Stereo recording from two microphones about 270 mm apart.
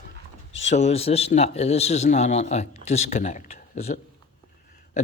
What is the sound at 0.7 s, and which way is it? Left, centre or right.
A man's voice, left.